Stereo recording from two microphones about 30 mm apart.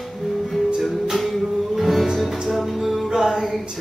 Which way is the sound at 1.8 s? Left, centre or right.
Centre.